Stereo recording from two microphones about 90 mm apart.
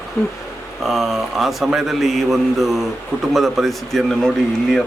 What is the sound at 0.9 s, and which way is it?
A man's voice, centre (ahead or behind).